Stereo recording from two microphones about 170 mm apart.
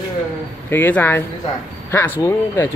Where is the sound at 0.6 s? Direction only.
10° left (ahead or behind).